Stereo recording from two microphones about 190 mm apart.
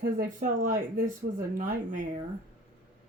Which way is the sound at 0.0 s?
45° right (ahead or behind).